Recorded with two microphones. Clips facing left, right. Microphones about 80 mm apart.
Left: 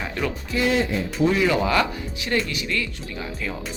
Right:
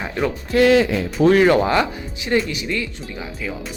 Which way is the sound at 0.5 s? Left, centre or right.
Right.